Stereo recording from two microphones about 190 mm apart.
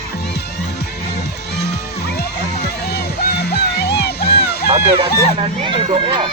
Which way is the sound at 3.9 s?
60° left (ahead or behind).